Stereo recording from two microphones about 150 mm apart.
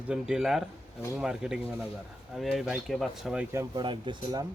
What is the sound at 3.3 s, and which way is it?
Speech, 15° right (ahead or behind).